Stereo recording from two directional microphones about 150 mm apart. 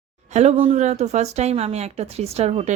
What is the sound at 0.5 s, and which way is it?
Speech, 45° right (ahead or behind).